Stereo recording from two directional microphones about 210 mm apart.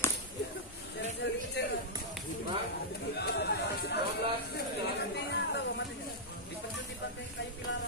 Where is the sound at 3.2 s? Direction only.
50° left (ahead or behind).